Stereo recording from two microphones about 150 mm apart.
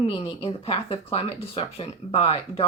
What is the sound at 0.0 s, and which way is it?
Speech, 40° left (ahead or behind).